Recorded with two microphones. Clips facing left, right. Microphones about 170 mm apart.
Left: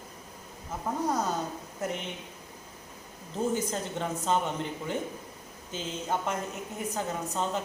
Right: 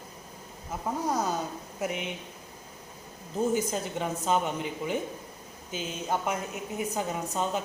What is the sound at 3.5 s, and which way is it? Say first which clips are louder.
Speech: right 2 dB; 10° right (ahead or behind).